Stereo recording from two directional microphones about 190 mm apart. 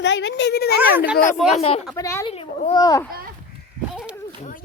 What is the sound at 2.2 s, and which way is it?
Speech, 30° left (ahead or behind).